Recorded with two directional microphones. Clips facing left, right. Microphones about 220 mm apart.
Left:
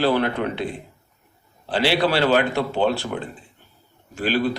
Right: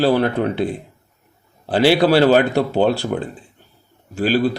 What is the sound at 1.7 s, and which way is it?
Speech, 40° right (ahead or behind).